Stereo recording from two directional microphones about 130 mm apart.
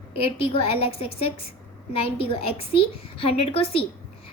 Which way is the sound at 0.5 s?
50° left (ahead or behind).